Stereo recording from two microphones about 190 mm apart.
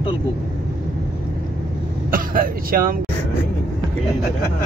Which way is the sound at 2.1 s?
50° right (ahead or behind).